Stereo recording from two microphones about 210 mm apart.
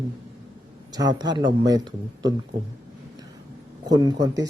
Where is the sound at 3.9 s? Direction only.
20° right (ahead or behind).